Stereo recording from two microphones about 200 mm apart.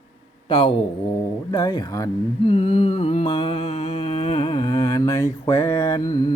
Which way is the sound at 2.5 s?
30° left (ahead or behind).